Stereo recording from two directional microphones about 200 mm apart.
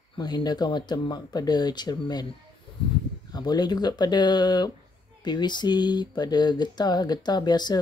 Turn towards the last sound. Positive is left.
turn(degrees=20)  # may be behind; listen again after turning